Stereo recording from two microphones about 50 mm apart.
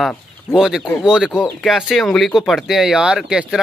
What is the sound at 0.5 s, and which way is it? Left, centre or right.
Speech, centre.